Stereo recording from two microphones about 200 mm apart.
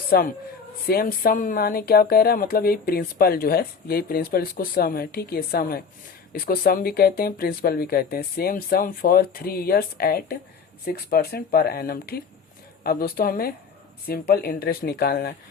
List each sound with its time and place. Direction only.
0.1 s speech: 45° left (ahead or behind)